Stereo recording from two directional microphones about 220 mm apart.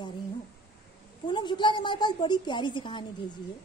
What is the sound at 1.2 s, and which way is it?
A woman's voice, 20° left (ahead or behind).